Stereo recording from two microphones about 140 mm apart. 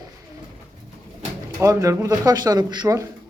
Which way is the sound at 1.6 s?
20° right (ahead or behind).